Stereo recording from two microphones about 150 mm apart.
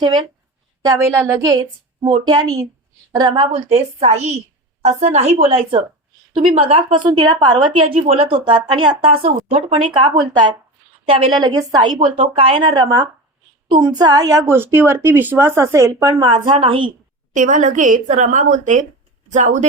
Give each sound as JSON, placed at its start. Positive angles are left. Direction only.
{"t": 0.0, "sound": "a woman's voice", "side_deg": -30}
{"t": 0.9, "sound": "a woman's voice", "side_deg": -20}
{"t": 2.0, "sound": "a woman's voice", "side_deg": -30}
{"t": 7.1, "sound": "a woman's voice", "side_deg": -25}
{"t": 10.0, "sound": "a woman's voice", "side_deg": -30}
{"t": 12.1, "sound": "a woman's voice", "side_deg": -40}
{"t": 17.3, "sound": "a woman's voice", "side_deg": -60}